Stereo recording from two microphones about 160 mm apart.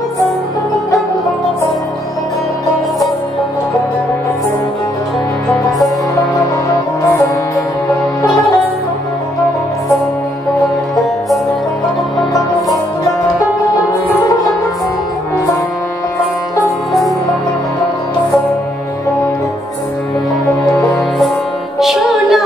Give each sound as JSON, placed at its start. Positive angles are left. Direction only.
{"t": 6.7, "sound": "music", "side_deg": 15}
{"t": 20.7, "sound": "music", "side_deg": 20}
{"t": 21.7, "sound": "music", "side_deg": 0}